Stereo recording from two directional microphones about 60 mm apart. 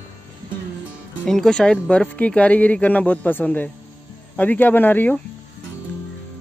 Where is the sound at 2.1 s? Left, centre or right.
Left.